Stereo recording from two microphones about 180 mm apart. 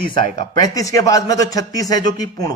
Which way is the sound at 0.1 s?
20° left (ahead or behind).